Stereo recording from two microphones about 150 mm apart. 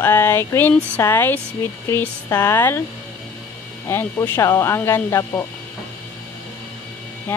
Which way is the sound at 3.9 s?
20° left (ahead or behind).